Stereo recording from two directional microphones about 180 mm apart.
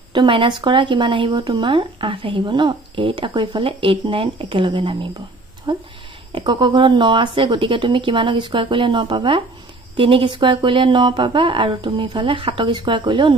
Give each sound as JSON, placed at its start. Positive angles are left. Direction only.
{"t": 0.1, "sound": "speech", "side_deg": -25}